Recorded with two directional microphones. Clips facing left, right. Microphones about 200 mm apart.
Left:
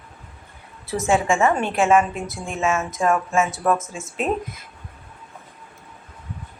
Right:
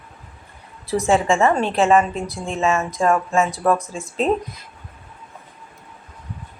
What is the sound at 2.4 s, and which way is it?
Speech, 35° right (ahead or behind).